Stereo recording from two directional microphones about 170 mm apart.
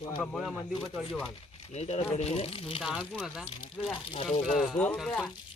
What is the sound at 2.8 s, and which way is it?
Speech, 5° right (ahead or behind).